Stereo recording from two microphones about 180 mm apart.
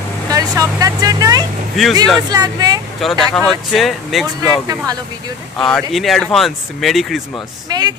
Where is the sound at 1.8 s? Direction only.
Centre (ahead or behind).